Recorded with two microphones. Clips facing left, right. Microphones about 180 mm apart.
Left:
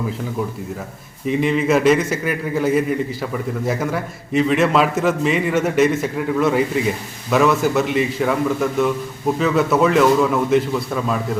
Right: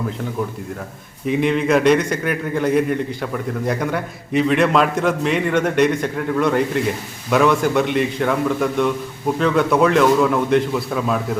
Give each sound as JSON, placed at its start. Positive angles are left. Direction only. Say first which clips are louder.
{"t": 1.3, "sound": "a man's voice", "louder": "even", "side_deg": 0}